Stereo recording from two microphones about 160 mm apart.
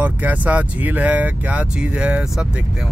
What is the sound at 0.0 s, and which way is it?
Speech, 10° right (ahead or behind).